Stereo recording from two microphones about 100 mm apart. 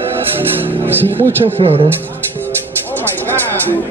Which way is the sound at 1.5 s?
70° right (ahead or behind).